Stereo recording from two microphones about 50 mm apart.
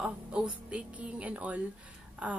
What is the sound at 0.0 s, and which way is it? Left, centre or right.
A woman's voice, right.